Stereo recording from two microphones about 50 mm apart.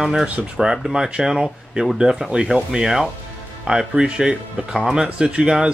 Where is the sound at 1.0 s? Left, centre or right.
Centre.